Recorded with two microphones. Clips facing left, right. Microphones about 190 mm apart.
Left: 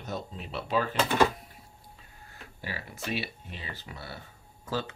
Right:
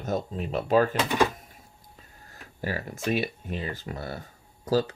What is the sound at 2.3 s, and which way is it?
Speech, 45° right (ahead or behind).